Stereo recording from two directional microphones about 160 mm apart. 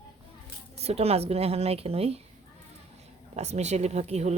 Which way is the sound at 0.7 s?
40° right (ahead or behind).